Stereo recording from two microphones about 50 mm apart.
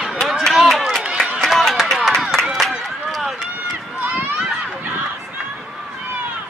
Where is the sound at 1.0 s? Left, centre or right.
Centre.